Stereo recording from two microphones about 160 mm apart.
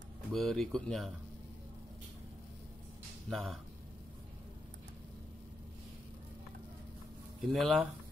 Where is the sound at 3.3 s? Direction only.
Centre (ahead or behind).